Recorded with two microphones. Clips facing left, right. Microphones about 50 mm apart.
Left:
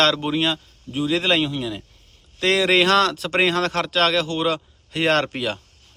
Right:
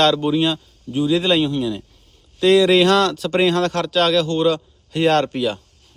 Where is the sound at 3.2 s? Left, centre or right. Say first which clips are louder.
Right 3 dB; left.